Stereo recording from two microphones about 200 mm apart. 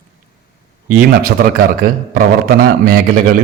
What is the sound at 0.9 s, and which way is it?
A man's voice, 45° right (ahead or behind).